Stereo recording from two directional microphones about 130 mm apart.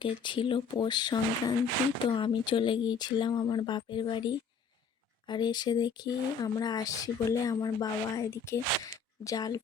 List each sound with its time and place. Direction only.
0.0 s speech: 40° left (ahead or behind)